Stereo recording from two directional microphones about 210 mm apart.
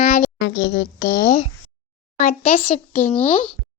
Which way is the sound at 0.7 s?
45° left (ahead or behind).